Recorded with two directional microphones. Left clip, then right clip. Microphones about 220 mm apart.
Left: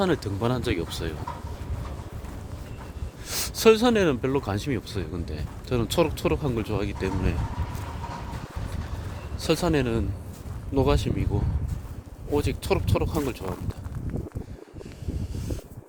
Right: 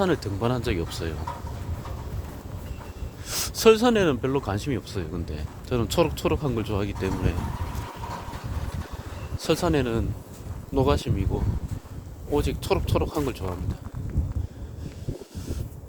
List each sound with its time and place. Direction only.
0.0 s speech: 10° left (ahead or behind)
3.2 s speech: 5° left (ahead or behind)
9.4 s speech: 5° left (ahead or behind)
12.3 s speech: 5° left (ahead or behind)
13.4 s speech: 15° left (ahead or behind)